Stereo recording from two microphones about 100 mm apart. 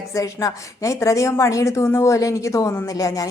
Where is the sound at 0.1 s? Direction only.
35° left (ahead or behind).